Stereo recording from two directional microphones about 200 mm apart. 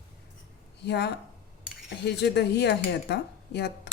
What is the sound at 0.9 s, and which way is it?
Speech, 55° left (ahead or behind).